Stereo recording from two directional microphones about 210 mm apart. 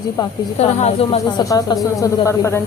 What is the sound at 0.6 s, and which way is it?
A woman's voice, 30° left (ahead or behind).